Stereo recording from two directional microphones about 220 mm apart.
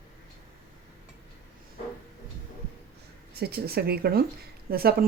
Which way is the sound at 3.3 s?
45° right (ahead or behind).